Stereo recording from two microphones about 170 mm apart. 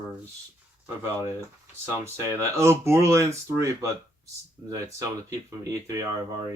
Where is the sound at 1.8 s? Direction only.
15° right (ahead or behind).